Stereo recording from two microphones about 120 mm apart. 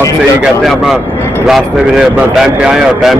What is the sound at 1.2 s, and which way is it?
Vehicle, 20° left (ahead or behind).